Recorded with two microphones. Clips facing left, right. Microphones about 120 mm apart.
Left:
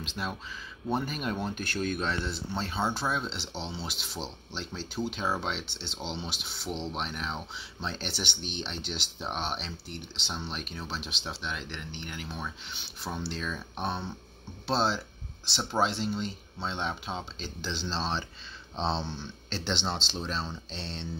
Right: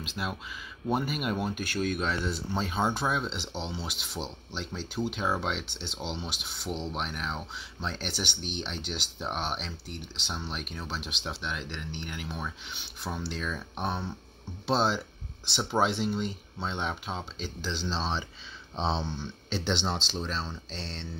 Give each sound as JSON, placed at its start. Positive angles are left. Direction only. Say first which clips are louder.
{"t": 0.0, "sound": "speech", "louder": "right 1 dB", "side_deg": -5}
{"t": 3.3, "sound": "speech", "louder": "right 2 dB", "side_deg": -15}